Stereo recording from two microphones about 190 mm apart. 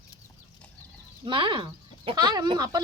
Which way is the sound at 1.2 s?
25° right (ahead or behind).